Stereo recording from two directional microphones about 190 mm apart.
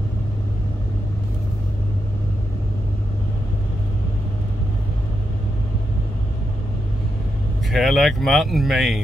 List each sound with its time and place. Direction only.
7.7 s speech: centre (ahead or behind)